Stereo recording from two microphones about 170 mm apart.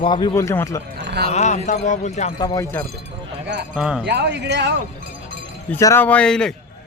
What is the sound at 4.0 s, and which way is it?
Speech, 85° right.